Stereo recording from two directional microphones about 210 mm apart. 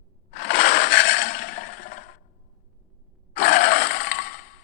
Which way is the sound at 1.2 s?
45° left (ahead or behind).